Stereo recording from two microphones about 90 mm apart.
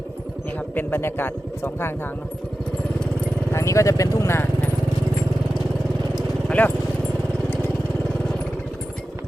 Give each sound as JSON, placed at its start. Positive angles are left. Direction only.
{"t": 0.8, "sound": "speech", "side_deg": 25}
{"t": 3.5, "sound": "speech", "side_deg": 35}
{"t": 6.5, "sound": "speech", "side_deg": 15}